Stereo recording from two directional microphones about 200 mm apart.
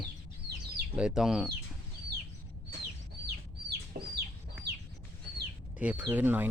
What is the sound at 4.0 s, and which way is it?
Chicken, 45° right (ahead or behind).